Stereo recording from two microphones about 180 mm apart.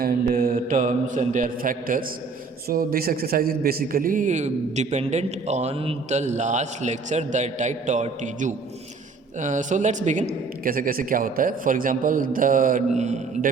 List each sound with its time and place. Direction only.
0.0 s a man's voice: 50° right (ahead or behind)